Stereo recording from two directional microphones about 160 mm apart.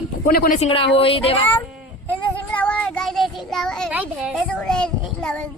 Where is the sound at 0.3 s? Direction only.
65° left (ahead or behind).